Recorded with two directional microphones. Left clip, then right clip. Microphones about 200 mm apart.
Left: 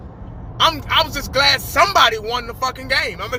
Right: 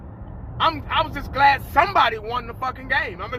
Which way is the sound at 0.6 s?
30° left (ahead or behind).